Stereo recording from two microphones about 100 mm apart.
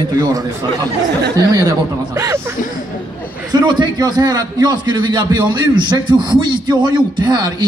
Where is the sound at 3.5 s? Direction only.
45° right (ahead or behind).